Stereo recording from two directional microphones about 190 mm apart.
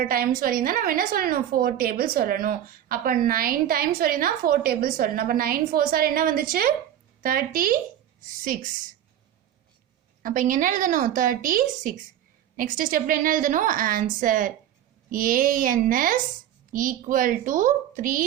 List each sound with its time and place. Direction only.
0.0 s a woman's voice: 50° right (ahead or behind)
10.2 s a woman's voice: 45° right (ahead or behind)